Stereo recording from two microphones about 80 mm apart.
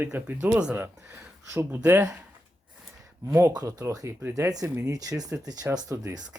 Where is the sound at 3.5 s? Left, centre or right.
Right.